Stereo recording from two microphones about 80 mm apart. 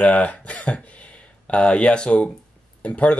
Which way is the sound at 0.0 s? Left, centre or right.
Centre.